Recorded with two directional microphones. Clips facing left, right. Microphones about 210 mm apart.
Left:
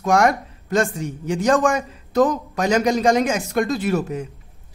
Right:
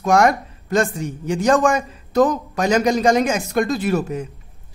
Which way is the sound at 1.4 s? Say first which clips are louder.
Right 1 dB; 40° right (ahead or behind).